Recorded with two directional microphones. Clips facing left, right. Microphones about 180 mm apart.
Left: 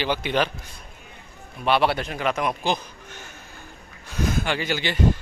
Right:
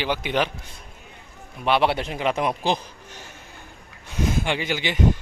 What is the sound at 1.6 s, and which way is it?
A man's voice, 20° right (ahead or behind).